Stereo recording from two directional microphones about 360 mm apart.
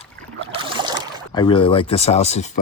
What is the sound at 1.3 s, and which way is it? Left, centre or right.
Speech, centre.